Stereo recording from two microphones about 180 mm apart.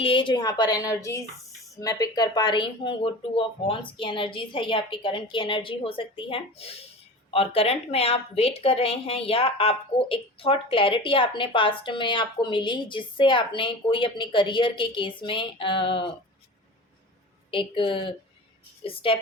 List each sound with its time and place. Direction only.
0.0 s a woman's voice: 30° left (ahead or behind)
17.5 s a woman's voice: 30° left (ahead or behind)